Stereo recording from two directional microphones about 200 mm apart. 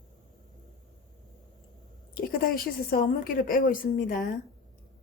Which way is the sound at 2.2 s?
45° left (ahead or behind).